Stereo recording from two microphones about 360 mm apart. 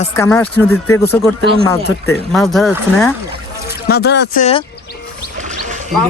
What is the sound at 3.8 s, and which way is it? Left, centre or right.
Speech, left.